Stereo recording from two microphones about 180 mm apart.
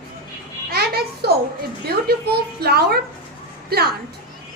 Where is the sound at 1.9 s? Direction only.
60° right (ahead or behind).